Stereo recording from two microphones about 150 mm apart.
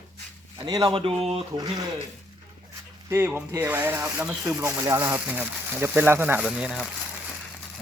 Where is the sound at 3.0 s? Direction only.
15° right (ahead or behind).